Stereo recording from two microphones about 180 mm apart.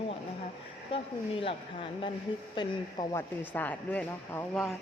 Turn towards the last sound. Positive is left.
turn(degrees=5)  # may be behind; listen again after turning